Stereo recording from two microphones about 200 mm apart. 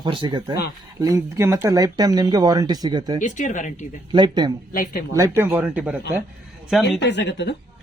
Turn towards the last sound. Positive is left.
turn(degrees=60)  # may be behind; listen again after turning